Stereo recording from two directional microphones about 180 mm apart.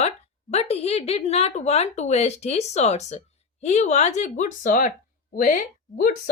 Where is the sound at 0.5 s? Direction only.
35° left (ahead or behind).